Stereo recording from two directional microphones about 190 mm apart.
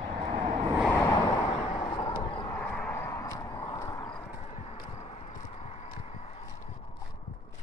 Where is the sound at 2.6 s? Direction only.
5° left (ahead or behind).